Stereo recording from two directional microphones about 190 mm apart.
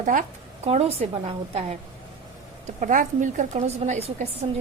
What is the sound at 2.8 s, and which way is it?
A woman's voice, 45° right (ahead or behind).